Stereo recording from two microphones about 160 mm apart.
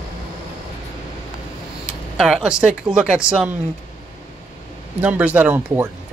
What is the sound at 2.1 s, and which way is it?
Speech, 5° right (ahead or behind).